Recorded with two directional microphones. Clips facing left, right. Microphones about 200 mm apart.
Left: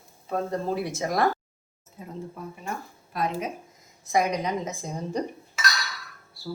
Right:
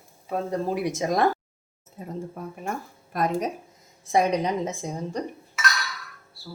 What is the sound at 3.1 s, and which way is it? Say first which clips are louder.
Speech: right 3 dB; 45° right (ahead or behind).